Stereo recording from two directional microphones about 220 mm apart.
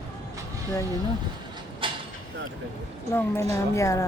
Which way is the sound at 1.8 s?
20° right (ahead or behind).